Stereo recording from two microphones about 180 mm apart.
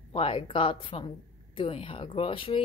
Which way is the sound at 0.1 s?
30° left (ahead or behind).